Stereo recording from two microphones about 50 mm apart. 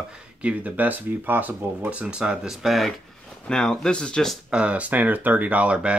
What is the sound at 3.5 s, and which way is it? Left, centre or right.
Speech, centre.